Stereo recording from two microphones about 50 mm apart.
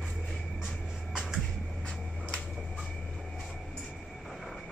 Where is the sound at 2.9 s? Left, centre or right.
Centre.